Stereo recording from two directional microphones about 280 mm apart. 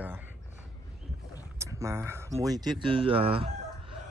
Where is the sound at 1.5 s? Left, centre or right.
Centre.